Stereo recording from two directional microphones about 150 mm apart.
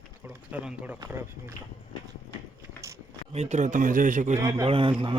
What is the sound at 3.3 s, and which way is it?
A man's voice, 45° right (ahead or behind).